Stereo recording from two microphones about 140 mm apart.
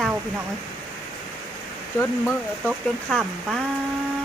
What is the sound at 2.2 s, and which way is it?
Speech, centre (ahead or behind).